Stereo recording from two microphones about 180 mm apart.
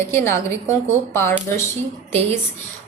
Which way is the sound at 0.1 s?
15° left (ahead or behind).